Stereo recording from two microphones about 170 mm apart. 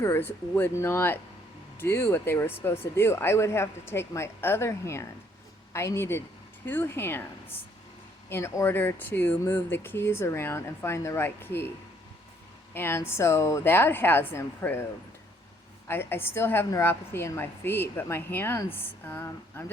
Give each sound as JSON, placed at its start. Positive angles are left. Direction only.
{"t": 0.0, "sound": "a woman's voice", "side_deg": 15}
{"t": 12.7, "sound": "a woman's voice", "side_deg": 15}
{"t": 15.9, "sound": "a woman's voice", "side_deg": 15}